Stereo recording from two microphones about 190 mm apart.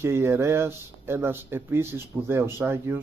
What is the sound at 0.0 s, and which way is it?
Speech, 15° right (ahead or behind).